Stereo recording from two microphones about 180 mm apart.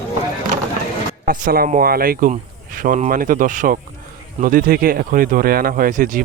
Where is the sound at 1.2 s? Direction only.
55° right (ahead or behind).